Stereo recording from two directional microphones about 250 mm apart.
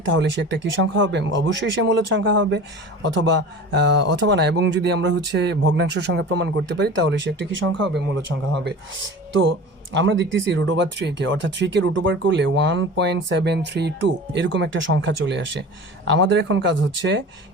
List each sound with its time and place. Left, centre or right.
0.0 s speech: right